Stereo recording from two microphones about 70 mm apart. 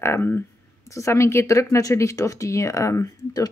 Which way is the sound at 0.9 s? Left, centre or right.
Left.